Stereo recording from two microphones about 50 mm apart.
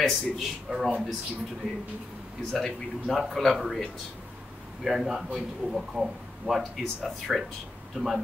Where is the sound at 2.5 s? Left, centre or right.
Centre.